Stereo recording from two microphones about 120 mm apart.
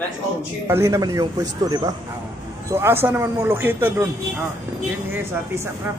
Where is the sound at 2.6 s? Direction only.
20° right (ahead or behind).